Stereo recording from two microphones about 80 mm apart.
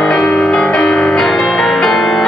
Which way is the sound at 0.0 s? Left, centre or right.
Centre.